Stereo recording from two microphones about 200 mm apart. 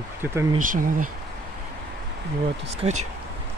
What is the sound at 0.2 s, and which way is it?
Speech, 15° right (ahead or behind).